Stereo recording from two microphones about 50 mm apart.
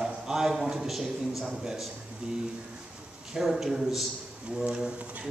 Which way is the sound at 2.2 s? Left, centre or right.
Right.